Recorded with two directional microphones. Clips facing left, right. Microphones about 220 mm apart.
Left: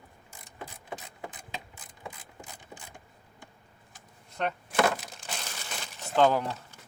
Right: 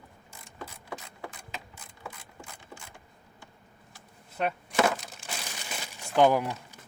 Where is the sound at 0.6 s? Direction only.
20° left (ahead or behind).